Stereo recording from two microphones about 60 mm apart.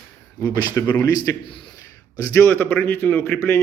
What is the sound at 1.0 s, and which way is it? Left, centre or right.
Speech, left.